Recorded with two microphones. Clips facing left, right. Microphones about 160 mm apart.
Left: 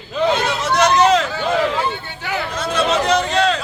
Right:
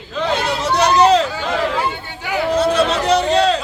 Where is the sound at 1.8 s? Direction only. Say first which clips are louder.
Even; 10° right (ahead or behind).